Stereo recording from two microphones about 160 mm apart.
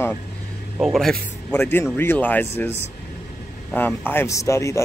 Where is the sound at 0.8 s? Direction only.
Centre (ahead or behind).